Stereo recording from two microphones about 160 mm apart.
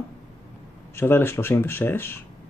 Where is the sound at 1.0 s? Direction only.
15° left (ahead or behind).